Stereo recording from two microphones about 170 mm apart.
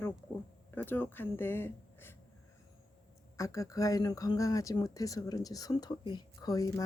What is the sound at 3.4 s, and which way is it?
Speech, 20° left (ahead or behind).